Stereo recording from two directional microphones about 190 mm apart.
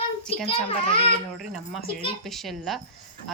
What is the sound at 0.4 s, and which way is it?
Speech, 30° left (ahead or behind).